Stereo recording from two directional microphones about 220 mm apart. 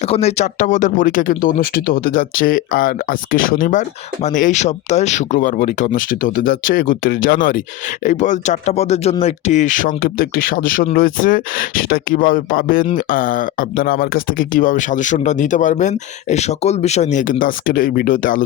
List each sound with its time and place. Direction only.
0.0 s speech: 30° left (ahead or behind)